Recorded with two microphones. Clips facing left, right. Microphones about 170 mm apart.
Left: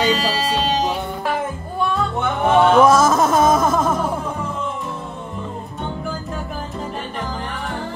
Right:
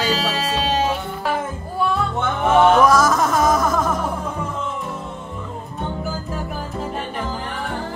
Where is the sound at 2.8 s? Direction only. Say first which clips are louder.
Left 2 dB; 25° left (ahead or behind).